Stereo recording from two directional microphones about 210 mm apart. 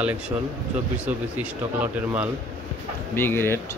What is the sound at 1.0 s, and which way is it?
Speech, 5° right (ahead or behind).